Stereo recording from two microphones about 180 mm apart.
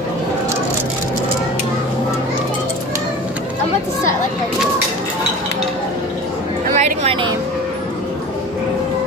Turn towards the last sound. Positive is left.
turn(degrees=-30)  # may be behind; listen again after turning